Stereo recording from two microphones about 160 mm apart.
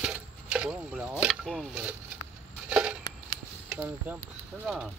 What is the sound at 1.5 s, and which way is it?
Speech, 5° right (ahead or behind).